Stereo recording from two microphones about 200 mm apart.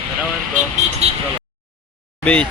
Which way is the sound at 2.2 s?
5° left (ahead or behind).